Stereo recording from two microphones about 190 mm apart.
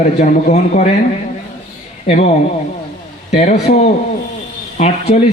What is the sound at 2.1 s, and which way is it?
A man's voice, 35° left (ahead or behind).